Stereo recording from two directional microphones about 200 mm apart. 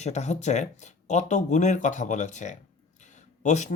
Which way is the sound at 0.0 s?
35° left (ahead or behind).